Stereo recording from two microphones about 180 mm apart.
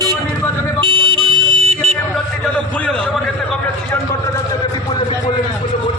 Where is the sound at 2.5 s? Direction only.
5° left (ahead or behind).